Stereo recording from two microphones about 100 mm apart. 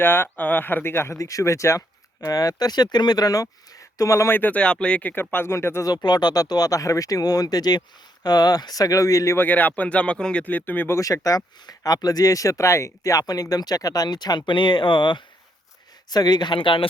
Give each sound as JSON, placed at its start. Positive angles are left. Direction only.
{"t": 0.0, "sound": "speech", "side_deg": 20}
{"t": 5.9, "sound": "speech", "side_deg": 45}